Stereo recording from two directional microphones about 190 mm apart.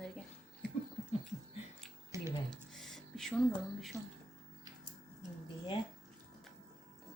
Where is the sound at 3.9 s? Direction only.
Centre (ahead or behind).